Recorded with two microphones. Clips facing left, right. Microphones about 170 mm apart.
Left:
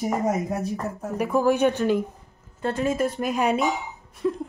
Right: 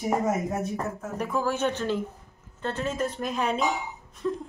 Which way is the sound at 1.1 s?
15° left (ahead or behind).